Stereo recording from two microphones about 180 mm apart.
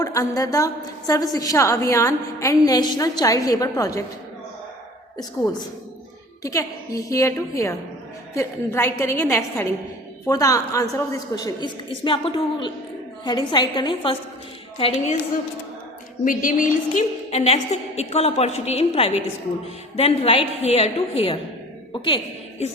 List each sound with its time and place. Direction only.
0.0 s a woman's voice: 20° left (ahead or behind)
6.4 s a woman's voice: 20° left (ahead or behind)
16.2 s a woman's voice: 50° left (ahead or behind); by 22.7 s 30° left (ahead or behind)